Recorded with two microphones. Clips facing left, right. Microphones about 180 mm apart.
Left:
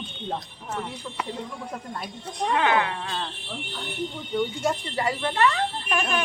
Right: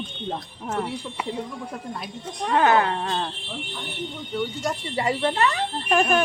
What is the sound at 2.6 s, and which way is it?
Speech, 45° right (ahead or behind).